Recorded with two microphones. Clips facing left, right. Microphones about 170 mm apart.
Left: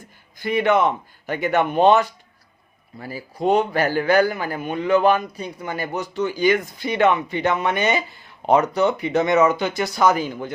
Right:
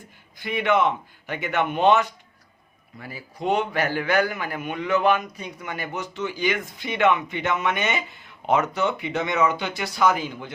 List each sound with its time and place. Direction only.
0.3 s a man's voice: 40° left (ahead or behind)